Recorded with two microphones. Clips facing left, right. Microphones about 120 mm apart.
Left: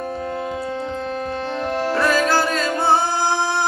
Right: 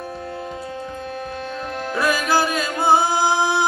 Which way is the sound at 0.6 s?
75° left (ahead or behind).